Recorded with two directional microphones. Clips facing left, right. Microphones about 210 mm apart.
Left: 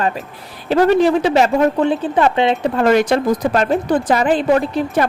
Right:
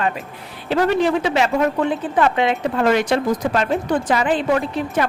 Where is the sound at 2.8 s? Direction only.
45° left (ahead or behind).